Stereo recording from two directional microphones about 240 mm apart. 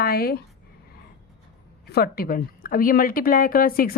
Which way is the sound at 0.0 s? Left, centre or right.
Left.